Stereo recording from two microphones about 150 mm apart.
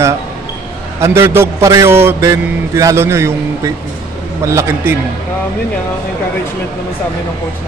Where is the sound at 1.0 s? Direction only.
15° right (ahead or behind).